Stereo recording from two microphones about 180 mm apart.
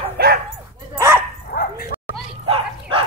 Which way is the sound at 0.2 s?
60° right (ahead or behind).